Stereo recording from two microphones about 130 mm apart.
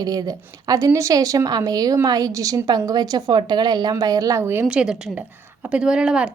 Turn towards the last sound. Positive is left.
turn(degrees=-5)  # may be behind; listen again after turning